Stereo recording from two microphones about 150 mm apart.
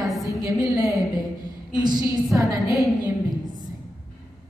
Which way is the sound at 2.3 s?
15° right (ahead or behind).